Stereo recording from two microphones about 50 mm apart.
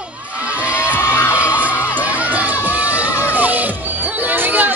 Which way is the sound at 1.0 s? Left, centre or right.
Left.